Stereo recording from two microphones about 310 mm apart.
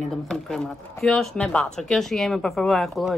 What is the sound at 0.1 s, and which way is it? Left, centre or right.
Speech, centre.